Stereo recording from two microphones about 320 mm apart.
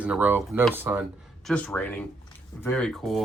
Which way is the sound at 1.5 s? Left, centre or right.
Centre.